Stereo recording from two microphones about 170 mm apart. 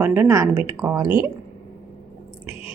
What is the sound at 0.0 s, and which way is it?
A woman's voice, 10° right (ahead or behind).